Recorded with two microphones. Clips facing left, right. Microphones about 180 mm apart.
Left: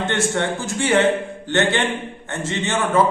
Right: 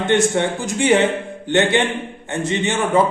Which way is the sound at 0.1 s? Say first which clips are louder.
Right 8 dB; 15° right (ahead or behind).